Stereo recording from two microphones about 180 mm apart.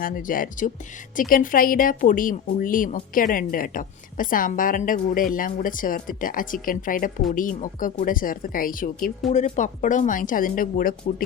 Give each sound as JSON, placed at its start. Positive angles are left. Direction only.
{"t": 0.0, "sound": "speech", "side_deg": 50}